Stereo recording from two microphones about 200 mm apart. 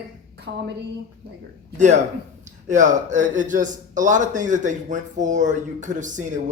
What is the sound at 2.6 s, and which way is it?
A man's voice, 40° right (ahead or behind).